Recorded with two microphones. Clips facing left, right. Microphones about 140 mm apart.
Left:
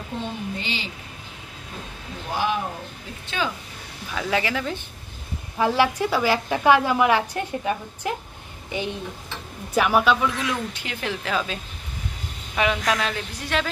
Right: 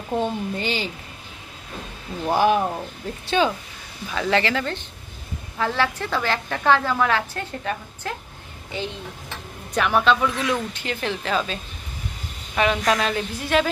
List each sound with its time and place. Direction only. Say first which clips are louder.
0.6 s speech: right 5 dB; 45° right (ahead or behind)
2.2 s speech: right 7 dB; 50° right (ahead or behind)
3.3 s speech: right 7 dB; 25° right (ahead or behind)
4.1 s a woman's voice: right 3 dB; 5° left (ahead or behind)
12.5 s speech: right 2 dB; 5° left (ahead or behind)